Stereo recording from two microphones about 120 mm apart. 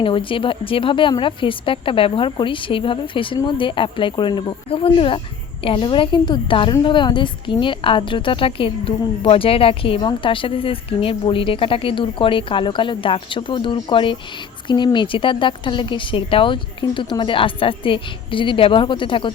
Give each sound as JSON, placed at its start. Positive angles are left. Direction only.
{"t": 0.0, "sound": "a woman's voice", "side_deg": 45}